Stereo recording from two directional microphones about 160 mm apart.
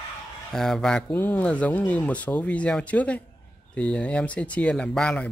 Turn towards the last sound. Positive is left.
turn(degrees=5)  # may be behind; listen again after turning